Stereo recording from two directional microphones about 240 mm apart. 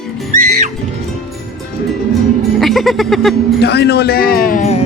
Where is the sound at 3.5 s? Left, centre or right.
Left.